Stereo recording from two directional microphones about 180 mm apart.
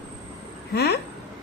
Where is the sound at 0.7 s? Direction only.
65° left (ahead or behind).